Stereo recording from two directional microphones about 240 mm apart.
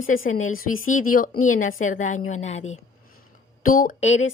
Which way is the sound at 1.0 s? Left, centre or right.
Left.